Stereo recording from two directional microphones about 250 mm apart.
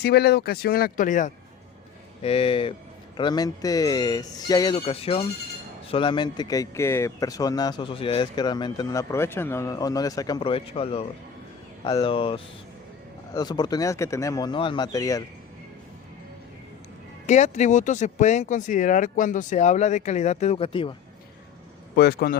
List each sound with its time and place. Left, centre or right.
0.0 s a man's voice: left; by 15.2 s centre
17.2 s speech: left
21.9 s speech: left